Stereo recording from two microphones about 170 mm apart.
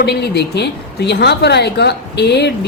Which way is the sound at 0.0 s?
75° left (ahead or behind).